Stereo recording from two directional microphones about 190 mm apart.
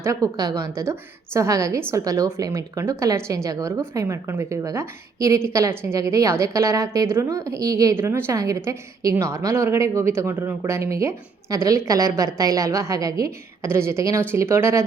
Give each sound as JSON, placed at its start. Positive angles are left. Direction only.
{"t": 0.0, "sound": "a woman's voice", "side_deg": -15}